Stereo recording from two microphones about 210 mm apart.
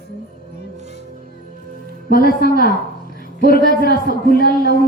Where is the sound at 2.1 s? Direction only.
45° left (ahead or behind).